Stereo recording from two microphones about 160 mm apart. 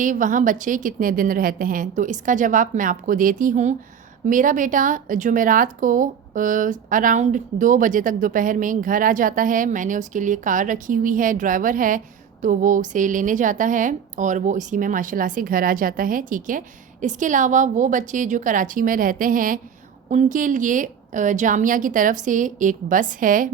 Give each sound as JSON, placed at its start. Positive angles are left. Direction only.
{"t": 0.0, "sound": "a woman's voice", "side_deg": -55}